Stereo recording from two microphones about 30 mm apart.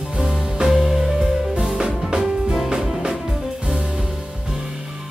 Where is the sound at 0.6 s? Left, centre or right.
Centre.